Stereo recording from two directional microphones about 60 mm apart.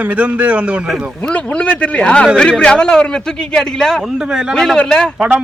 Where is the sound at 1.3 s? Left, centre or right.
Left.